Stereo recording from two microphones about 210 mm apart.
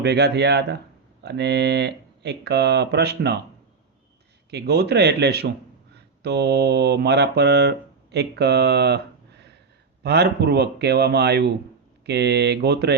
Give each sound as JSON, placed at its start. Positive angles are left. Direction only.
{"t": 0.0, "sound": "speech", "side_deg": -55}
{"t": 4.5, "sound": "speech", "side_deg": -50}
{"t": 10.0, "sound": "speech", "side_deg": -50}